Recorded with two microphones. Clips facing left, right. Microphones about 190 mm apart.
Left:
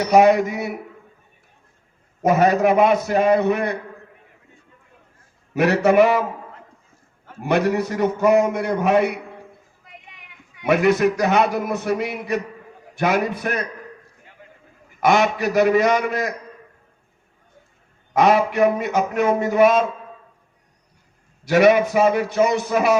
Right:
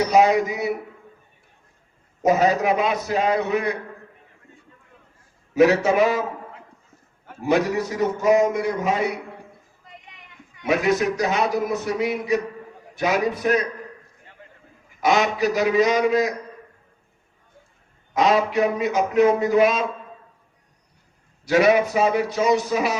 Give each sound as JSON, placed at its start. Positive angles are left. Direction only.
{"t": 0.1, "sound": "a man's voice", "side_deg": 55}
{"t": 2.2, "sound": "a man's voice", "side_deg": 55}
{"t": 5.5, "sound": "a man's voice", "side_deg": 60}
{"t": 7.4, "sound": "a man's voice", "side_deg": 60}
{"t": 10.7, "sound": "a man's voice", "side_deg": 60}
{"t": 15.0, "sound": "a man's voice", "side_deg": 55}
{"t": 18.1, "sound": "a man's voice", "side_deg": 55}
{"t": 21.5, "sound": "a man's voice", "side_deg": 55}